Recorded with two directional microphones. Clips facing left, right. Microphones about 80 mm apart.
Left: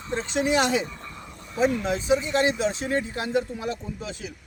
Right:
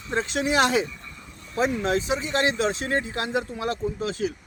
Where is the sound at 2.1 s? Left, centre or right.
Right.